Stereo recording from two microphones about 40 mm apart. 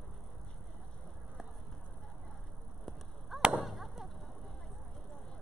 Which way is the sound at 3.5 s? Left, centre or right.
Centre.